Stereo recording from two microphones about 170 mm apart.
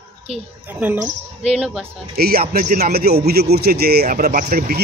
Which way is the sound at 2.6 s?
50° right (ahead or behind).